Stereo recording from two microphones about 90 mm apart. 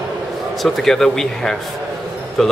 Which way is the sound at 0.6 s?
Centre (ahead or behind).